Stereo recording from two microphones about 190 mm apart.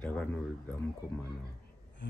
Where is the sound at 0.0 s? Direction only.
10° left (ahead or behind).